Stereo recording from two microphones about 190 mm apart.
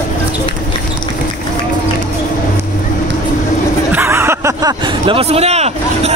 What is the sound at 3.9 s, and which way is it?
Speech, 10° right (ahead or behind).